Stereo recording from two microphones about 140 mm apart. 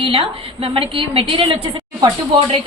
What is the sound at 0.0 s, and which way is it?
A woman's voice, 40° right (ahead or behind).